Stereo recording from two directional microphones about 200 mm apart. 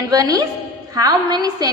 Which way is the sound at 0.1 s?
20° right (ahead or behind).